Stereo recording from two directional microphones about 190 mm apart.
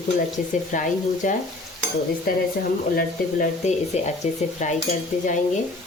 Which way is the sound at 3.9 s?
35° left (ahead or behind).